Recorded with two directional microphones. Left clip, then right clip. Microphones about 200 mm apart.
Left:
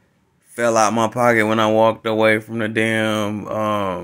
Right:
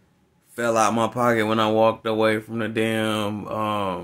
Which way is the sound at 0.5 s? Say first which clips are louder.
Left 4 dB; 15° left (ahead or behind).